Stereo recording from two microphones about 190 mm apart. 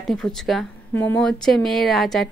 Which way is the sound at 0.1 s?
Centre (ahead or behind).